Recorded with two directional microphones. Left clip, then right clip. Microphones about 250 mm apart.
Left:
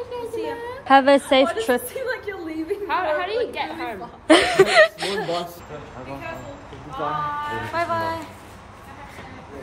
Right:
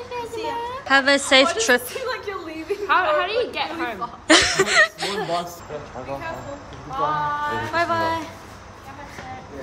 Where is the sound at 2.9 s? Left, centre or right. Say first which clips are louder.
Right 4 dB; right.